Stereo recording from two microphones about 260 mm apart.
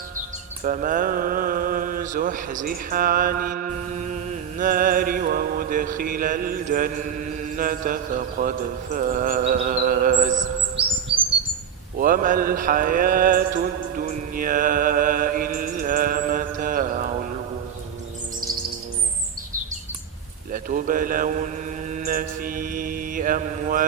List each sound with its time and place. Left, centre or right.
0.6 s speech: right
11.9 s speech: right
14.3 s mantra: right
20.5 s a man's voice: right
21.8 s mantra: right